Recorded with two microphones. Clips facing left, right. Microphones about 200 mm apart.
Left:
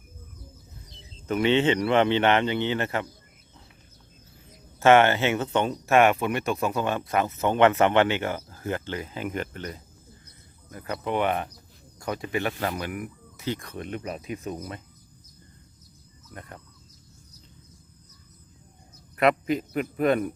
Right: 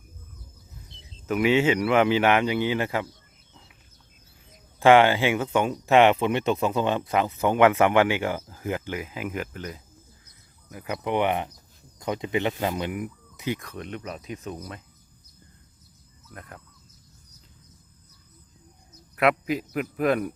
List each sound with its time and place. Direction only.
1.3 s speech: 5° right (ahead or behind)
4.8 s speech: 15° right (ahead or behind)
13.6 s speech: centre (ahead or behind)
16.3 s speech: centre (ahead or behind)
19.1 s speech: 5° right (ahead or behind)